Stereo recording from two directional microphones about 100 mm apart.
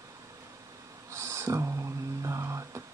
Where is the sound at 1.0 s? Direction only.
30° right (ahead or behind).